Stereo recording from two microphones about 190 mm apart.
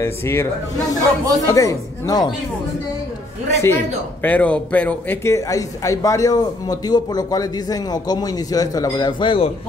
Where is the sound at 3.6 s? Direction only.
15° left (ahead or behind).